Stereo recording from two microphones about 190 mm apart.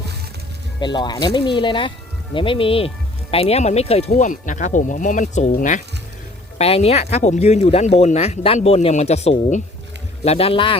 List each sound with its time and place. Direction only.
0.8 s speech: 25° left (ahead or behind); by 5.8 s 45° left (ahead or behind)
6.6 s speech: 30° left (ahead or behind)